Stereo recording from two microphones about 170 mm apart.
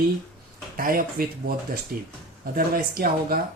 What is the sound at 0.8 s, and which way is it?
Speech, 55° right (ahead or behind).